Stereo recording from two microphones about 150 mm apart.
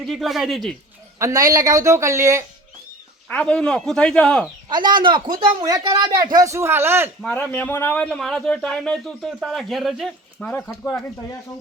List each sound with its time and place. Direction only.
0.0 s a man's voice: centre (ahead or behind)
1.2 s speech: 25° right (ahead or behind)
3.2 s speech: 5° left (ahead or behind)
4.7 s speech: 30° right (ahead or behind)
7.3 s a man's voice: 10° left (ahead or behind)